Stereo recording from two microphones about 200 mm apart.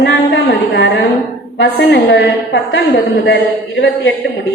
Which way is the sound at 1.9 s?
65° left (ahead or behind).